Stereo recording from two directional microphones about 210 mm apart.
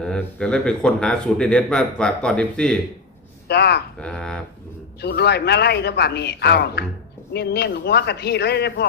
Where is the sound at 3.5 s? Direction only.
50° left (ahead or behind).